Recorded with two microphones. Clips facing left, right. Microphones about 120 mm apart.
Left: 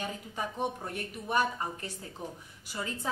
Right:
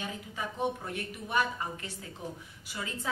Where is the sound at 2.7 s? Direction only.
35° left (ahead or behind).